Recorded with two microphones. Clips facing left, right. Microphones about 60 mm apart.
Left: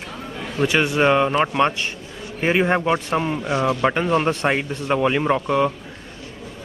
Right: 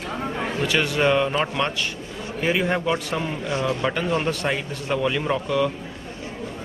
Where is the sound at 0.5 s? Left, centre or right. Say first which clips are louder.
Left 5 dB; left.